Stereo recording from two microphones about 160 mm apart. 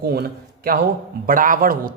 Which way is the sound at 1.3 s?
55° right (ahead or behind).